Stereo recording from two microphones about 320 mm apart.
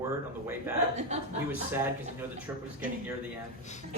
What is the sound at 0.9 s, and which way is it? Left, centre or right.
Speech, right.